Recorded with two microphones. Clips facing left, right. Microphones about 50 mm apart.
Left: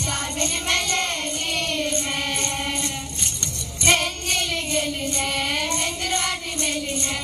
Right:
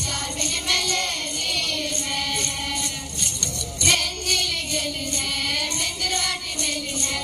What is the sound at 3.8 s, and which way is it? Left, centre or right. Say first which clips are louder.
Child singing: left 3 dB; left.